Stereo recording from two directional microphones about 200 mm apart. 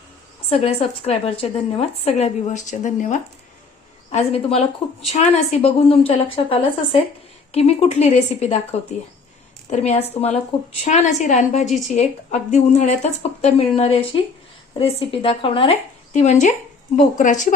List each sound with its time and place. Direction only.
0.5 s a woman's voice: 30° left (ahead or behind)
9.6 s a woman's voice: 35° left (ahead or behind)